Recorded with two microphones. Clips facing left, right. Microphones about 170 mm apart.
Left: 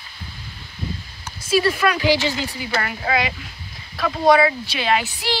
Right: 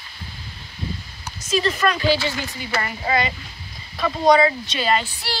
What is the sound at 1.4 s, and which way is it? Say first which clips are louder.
A woman's voice: left 2 dB; 5° left (ahead or behind).